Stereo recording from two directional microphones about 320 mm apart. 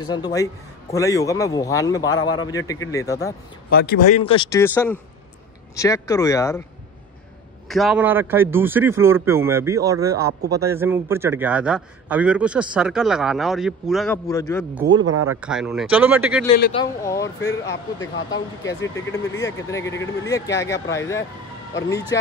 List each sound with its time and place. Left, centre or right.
0.0 s a man's voice: centre
3.7 s a man's voice: left; by 6.6 s centre
7.6 s a man's voice: centre
14.9 s speech: right
15.2 s a man's voice: centre
16.7 s a man's voice: centre
17.6 s speech: left
18.6 s a man's voice: centre